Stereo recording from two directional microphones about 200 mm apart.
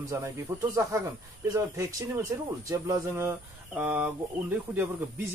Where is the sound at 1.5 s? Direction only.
15° right (ahead or behind).